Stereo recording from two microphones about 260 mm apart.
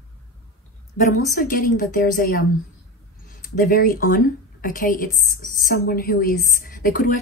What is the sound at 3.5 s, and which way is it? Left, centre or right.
A woman's voice, left.